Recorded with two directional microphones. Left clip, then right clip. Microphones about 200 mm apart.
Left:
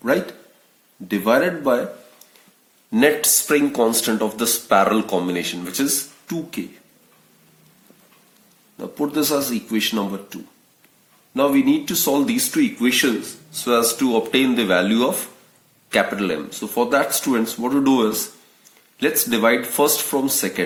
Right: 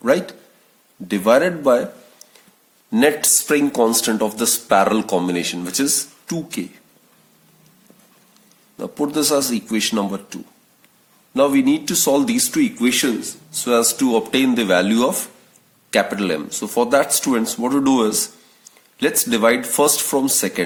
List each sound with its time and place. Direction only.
0.0 s speech: 45° right (ahead or behind)
2.9 s speech: 40° right (ahead or behind)
8.8 s speech: 45° right (ahead or behind)